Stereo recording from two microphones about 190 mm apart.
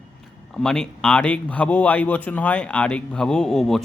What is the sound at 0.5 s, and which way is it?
Speech, 5° left (ahead or behind).